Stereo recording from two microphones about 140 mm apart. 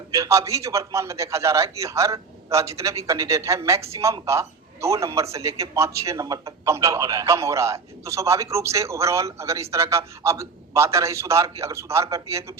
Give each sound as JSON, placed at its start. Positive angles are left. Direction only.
{"t": 0.1, "sound": "a man's voice", "side_deg": -20}